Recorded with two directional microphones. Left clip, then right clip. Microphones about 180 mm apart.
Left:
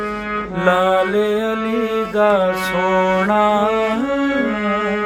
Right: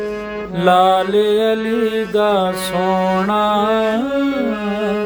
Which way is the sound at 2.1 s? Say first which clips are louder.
Left 2 dB; 55° right (ahead or behind).